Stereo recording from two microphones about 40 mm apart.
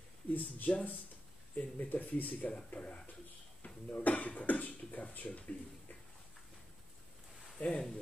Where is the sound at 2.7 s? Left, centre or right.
Left.